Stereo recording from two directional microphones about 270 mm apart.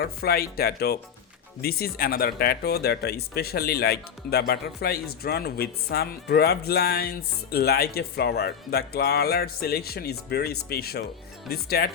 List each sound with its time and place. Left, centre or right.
0.0 s speech: left